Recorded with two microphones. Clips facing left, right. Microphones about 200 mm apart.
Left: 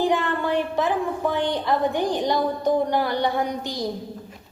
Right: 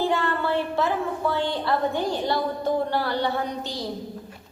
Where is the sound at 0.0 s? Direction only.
15° left (ahead or behind).